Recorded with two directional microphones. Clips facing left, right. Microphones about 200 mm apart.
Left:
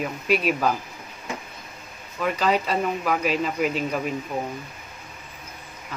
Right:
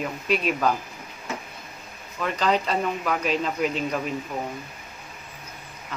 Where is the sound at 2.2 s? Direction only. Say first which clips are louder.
Left 1 dB; 10° left (ahead or behind).